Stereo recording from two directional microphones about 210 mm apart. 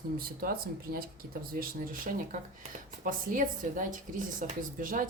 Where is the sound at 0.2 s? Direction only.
45° right (ahead or behind).